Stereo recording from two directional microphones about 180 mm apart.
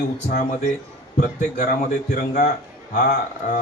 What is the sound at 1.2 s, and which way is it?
Speech, 40° left (ahead or behind).